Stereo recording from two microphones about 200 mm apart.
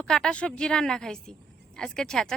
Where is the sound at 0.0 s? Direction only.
5° left (ahead or behind).